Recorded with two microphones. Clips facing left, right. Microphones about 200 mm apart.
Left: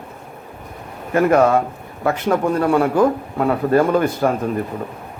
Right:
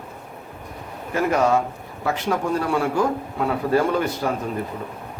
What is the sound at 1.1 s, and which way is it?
A man's voice, 55° left (ahead or behind).